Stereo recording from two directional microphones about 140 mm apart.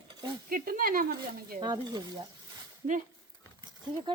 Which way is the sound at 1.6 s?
30° right (ahead or behind).